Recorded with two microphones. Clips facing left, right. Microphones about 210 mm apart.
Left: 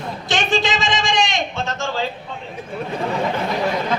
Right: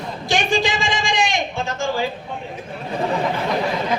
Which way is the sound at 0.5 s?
20° left (ahead or behind).